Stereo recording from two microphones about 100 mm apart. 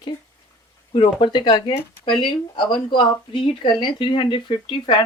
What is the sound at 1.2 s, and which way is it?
Speech, 55° left (ahead or behind).